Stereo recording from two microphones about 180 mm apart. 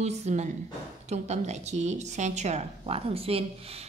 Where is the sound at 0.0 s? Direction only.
40° right (ahead or behind).